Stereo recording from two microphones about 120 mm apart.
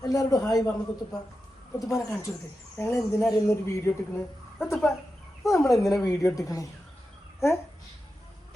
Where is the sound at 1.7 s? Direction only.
30° left (ahead or behind).